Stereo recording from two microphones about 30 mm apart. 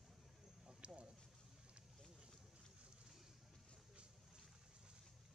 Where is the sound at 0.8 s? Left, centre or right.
Right.